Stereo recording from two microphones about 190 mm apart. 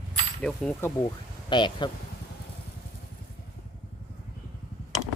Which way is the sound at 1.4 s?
25° left (ahead or behind).